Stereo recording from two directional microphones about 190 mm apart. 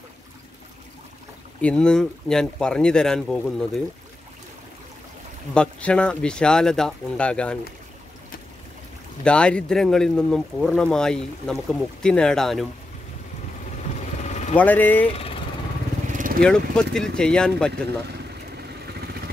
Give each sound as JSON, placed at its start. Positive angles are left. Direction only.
{"t": 1.6, "sound": "speech", "side_deg": 5}
{"t": 5.5, "sound": "speech", "side_deg": 5}
{"t": 9.2, "sound": "speech", "side_deg": 5}
{"t": 13.9, "sound": "vehicle", "side_deg": 40}
{"t": 14.6, "sound": "speech", "side_deg": 10}
{"t": 15.0, "sound": "speech", "side_deg": 30}
{"t": 16.1, "sound": "vehicle", "side_deg": -45}
{"t": 16.4, "sound": "speech", "side_deg": 5}
{"t": 18.6, "sound": "vehicle", "side_deg": -55}